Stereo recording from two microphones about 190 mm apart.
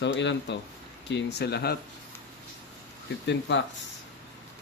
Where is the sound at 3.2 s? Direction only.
70° left (ahead or behind).